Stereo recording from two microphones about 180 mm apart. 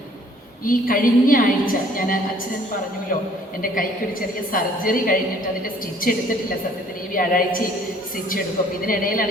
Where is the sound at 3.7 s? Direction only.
50° left (ahead or behind).